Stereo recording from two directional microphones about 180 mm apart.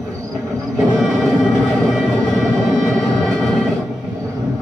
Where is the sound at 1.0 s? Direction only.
Centre (ahead or behind).